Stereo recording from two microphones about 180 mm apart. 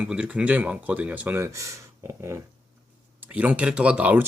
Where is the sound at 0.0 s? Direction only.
5° right (ahead or behind).